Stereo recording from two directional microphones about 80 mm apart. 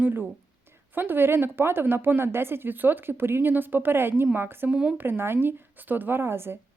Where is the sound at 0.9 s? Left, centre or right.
Right.